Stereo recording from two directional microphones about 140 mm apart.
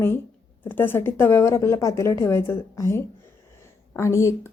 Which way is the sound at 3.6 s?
20° left (ahead or behind).